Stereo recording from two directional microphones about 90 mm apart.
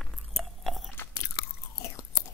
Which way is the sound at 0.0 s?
5° left (ahead or behind).